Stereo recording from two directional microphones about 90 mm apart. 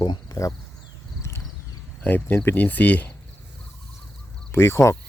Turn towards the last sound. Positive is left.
turn(degrees=30)  # may be behind; listen again after turning